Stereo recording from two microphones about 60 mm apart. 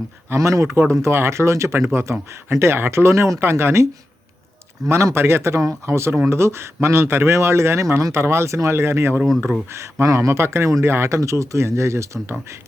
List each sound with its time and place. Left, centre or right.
0.3 s speech: right
0.8 s speech: right
3.4 s speech: right
4.9 s speech: right
11.2 s speech: right